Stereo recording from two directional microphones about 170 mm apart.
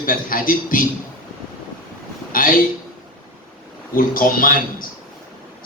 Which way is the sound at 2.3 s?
55° left (ahead or behind).